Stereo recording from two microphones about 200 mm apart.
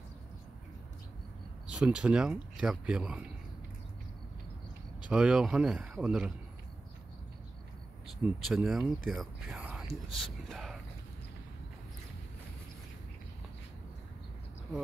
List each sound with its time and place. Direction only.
1.7 s speech: 5° right (ahead or behind)
5.1 s speech: 5° right (ahead or behind)
8.2 s speech: 5° right (ahead or behind)